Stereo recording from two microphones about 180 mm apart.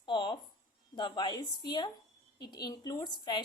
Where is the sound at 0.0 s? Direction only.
25° left (ahead or behind).